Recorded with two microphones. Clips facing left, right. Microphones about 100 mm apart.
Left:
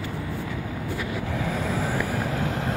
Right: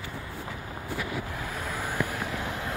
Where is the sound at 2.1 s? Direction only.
40° left (ahead or behind).